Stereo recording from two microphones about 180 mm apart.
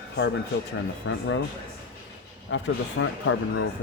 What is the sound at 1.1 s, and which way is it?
Speech, 90° left.